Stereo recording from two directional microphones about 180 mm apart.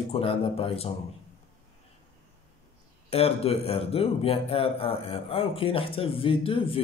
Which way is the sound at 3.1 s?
35° left (ahead or behind).